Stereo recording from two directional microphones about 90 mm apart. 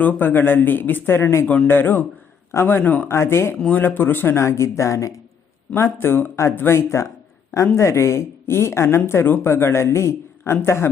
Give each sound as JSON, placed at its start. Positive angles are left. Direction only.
{"t": 0.0, "sound": "speech", "side_deg": 20}